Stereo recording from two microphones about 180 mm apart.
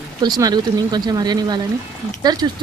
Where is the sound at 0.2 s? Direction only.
20° right (ahead or behind).